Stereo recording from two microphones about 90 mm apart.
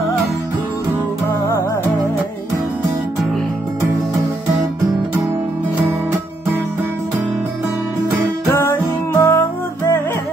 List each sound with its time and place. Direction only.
8.5 s music: 30° left (ahead or behind)